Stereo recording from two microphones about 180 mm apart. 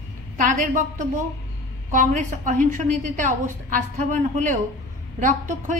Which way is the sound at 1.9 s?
45° right (ahead or behind).